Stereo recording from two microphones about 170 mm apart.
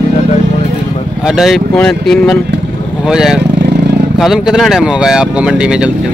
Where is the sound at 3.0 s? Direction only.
5° right (ahead or behind).